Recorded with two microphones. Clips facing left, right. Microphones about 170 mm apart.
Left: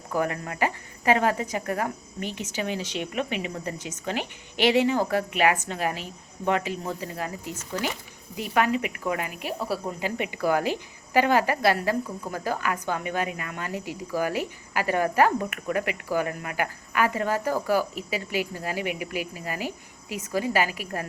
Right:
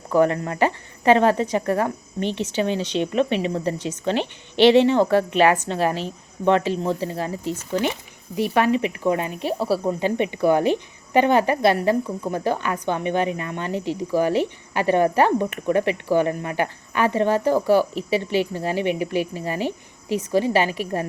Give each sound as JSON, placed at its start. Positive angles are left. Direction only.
{"t": 0.2, "sound": "speech", "side_deg": -30}